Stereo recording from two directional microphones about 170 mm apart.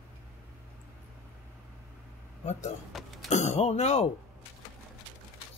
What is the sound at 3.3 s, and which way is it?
Speech, 40° left (ahead or behind).